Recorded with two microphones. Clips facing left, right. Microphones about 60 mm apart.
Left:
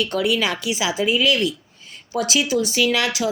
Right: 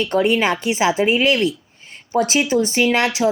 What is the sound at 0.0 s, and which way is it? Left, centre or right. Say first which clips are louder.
Speech: right 4 dB; right.